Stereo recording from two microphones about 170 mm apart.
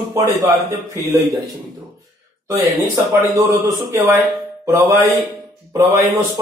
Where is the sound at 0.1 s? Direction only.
20° right (ahead or behind).